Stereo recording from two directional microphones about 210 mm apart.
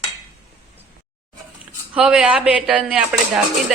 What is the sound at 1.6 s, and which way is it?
A woman's voice, 5° right (ahead or behind).